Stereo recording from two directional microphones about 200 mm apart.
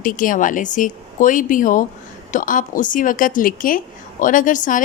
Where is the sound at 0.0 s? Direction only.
40° left (ahead or behind).